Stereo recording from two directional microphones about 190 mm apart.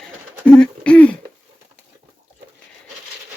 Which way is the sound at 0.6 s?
5° left (ahead or behind).